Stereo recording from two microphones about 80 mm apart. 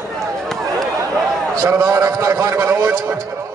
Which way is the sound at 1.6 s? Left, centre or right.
Right.